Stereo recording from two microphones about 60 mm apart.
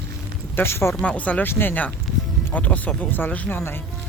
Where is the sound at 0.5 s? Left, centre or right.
Left.